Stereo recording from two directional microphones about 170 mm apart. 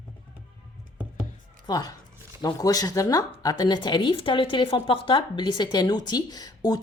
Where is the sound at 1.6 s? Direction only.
20° left (ahead or behind).